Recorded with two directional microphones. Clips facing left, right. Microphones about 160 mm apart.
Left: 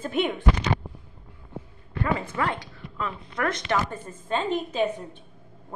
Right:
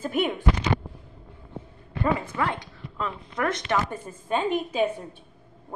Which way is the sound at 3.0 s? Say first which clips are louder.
Right 1 dB; 10° right (ahead or behind).